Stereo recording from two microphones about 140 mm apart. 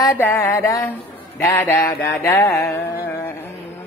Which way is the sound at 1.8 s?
25° left (ahead or behind).